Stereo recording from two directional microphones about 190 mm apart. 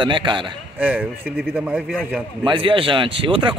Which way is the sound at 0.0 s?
25° right (ahead or behind).